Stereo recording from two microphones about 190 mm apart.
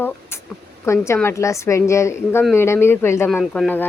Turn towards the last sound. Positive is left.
turn(degrees=10)  # may be behind; listen again after turning